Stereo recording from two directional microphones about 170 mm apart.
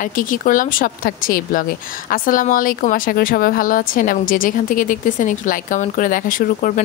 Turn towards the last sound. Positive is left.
turn(degrees=55)  # may be behind; listen again after turning